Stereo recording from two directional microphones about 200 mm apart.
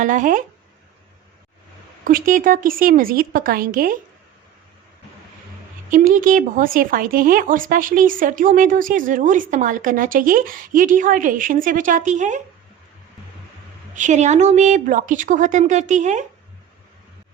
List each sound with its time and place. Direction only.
0.0 s a woman's voice: 40° right (ahead or behind)
2.0 s speech: 45° right (ahead or behind)
5.9 s speech: 45° right (ahead or behind)
13.9 s a woman's voice: 35° right (ahead or behind)